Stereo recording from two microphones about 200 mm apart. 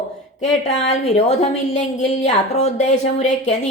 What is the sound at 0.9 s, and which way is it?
Speech, 35° left (ahead or behind).